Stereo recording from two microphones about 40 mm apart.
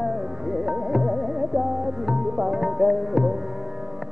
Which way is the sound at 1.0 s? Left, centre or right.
Centre.